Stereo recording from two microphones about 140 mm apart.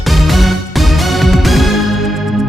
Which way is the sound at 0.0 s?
Centre (ahead or behind).